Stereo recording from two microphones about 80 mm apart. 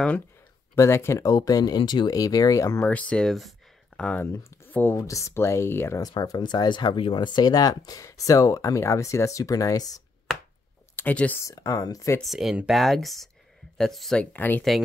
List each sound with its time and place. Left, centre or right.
0.7 s speech: left
1.8 s speech: left
2.0 s speech: left
2.8 s speech: centre
3.3 s speech: centre
3.9 s a sound: centre
4.2 s speech: left
6.2 s speech: left
11.0 s speech: left
11.3 s speech: left
12.2 s speech: centre
14.3 s speech: left